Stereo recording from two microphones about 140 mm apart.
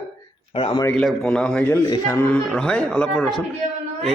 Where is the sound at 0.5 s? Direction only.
40° left (ahead or behind).